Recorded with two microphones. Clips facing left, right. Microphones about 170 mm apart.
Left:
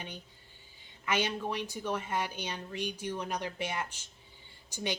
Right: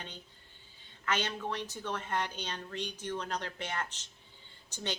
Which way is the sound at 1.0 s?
10° left (ahead or behind).